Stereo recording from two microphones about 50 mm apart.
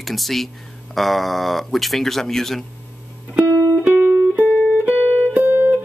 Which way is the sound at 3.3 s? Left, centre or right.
Right.